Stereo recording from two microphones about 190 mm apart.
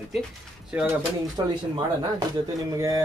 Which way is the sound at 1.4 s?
20° right (ahead or behind).